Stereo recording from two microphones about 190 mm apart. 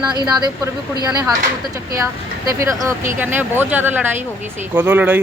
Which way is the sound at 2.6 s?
15° right (ahead or behind).